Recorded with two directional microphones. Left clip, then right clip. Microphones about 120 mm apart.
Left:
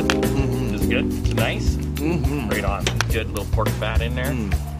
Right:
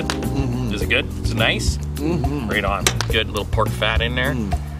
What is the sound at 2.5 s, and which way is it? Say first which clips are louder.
Speech: right 4 dB; 50° right (ahead or behind).